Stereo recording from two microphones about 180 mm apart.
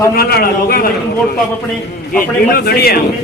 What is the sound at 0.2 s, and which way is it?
Speech, 60° left (ahead or behind).